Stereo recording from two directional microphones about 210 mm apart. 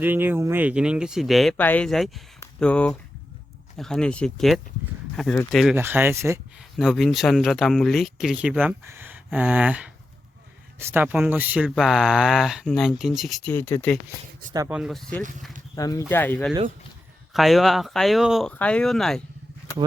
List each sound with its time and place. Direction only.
0.0 s speech: 10° right (ahead or behind)
5.7 s speech: 10° right (ahead or behind)
6.6 s speech: centre (ahead or behind)
14.7 s speech: centre (ahead or behind)
15.2 s speech: 35° right (ahead or behind)
15.7 s speech: 15° left (ahead or behind)